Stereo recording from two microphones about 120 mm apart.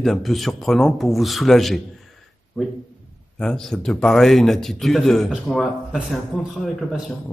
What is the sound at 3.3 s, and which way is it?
Speech, 5° left (ahead or behind).